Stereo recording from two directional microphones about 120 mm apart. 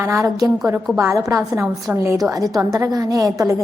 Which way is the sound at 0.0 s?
25° right (ahead or behind).